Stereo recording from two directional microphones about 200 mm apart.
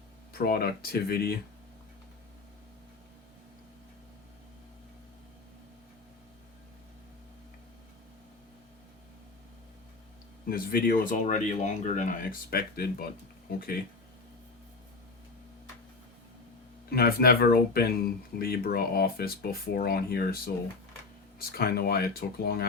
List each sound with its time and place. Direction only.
0.3 s speech: 50° left (ahead or behind)
10.5 s speech: 45° left (ahead or behind)
16.9 s speech: 50° left (ahead or behind)